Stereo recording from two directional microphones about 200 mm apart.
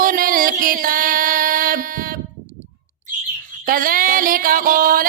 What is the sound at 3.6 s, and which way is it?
Music, 45° right (ahead or behind).